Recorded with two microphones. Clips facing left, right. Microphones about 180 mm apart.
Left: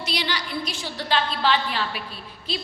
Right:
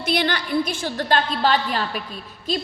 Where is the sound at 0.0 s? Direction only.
50° right (ahead or behind).